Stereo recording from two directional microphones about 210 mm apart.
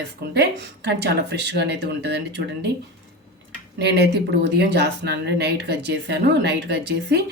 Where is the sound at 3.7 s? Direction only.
55° right (ahead or behind).